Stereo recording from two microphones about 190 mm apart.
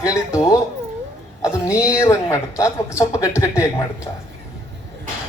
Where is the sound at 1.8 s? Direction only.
15° left (ahead or behind).